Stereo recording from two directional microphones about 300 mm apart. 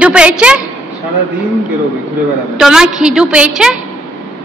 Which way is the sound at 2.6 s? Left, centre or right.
Centre.